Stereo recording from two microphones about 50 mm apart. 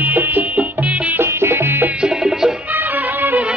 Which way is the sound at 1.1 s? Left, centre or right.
Right.